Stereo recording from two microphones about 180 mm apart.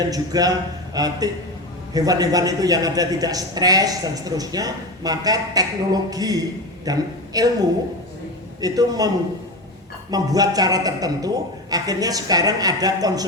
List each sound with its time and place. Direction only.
0.0 s a man's voice: 20° right (ahead or behind)
8.6 s a man's voice: 20° right (ahead or behind)
10.1 s a man's voice: 20° right (ahead or behind)